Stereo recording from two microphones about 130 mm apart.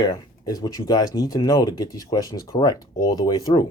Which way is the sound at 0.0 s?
30° left (ahead or behind).